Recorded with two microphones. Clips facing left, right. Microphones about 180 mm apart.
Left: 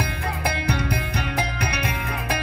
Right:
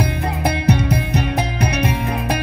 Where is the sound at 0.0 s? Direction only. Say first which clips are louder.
Right 6 dB; 25° right (ahead or behind).